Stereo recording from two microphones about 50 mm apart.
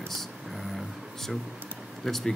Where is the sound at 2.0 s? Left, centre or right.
Centre.